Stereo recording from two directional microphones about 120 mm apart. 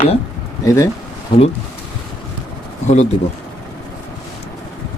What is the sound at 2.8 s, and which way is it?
Speech, 65° left (ahead or behind).